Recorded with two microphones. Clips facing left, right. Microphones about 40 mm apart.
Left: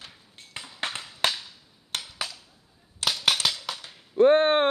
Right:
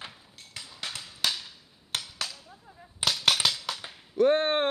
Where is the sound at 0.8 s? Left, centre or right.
Left.